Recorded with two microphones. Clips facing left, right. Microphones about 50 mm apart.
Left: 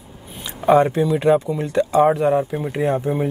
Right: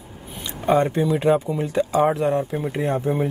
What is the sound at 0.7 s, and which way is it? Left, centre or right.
Speech, centre.